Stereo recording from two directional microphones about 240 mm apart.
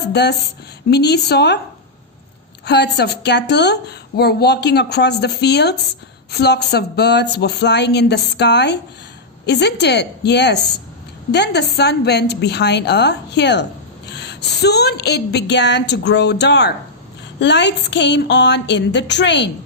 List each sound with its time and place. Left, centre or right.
0.1 s a woman's voice: left
2.6 s a woman's voice: left